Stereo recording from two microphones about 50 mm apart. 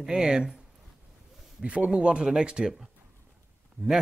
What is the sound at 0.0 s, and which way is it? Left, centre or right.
Speech, centre.